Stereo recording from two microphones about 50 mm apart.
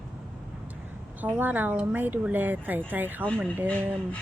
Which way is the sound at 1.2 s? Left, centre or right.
Right.